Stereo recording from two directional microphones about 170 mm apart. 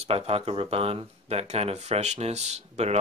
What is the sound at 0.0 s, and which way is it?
Speech, 35° right (ahead or behind).